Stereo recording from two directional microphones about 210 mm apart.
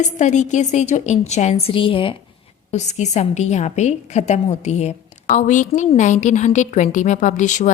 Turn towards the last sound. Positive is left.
turn(degrees=35)  # may be behind; listen again after turning